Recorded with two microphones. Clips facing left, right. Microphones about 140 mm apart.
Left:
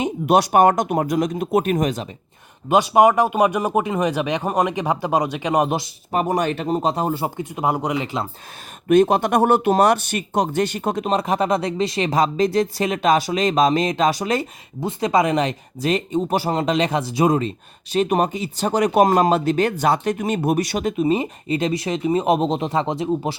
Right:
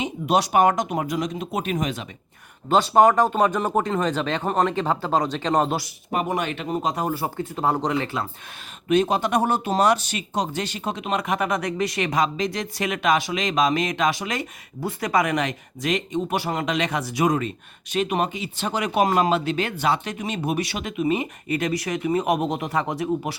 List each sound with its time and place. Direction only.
0.0 s speech: 55° left (ahead or behind)
2.6 s speech: 15° left (ahead or behind)
6.1 s speech: 35° left (ahead or behind)
7.3 s speech: 15° left (ahead or behind)
8.9 s speech: 50° left (ahead or behind)
11.1 s speech: 30° left (ahead or behind)
14.8 s speech: 25° left (ahead or behind)